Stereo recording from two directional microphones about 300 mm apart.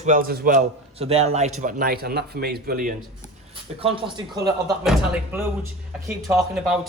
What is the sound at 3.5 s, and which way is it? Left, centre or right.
A man's voice, centre.